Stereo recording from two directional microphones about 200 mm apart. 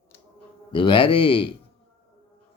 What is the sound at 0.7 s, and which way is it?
Speech, 25° left (ahead or behind).